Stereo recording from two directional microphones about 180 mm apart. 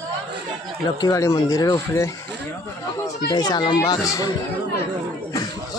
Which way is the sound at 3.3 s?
20° left (ahead or behind).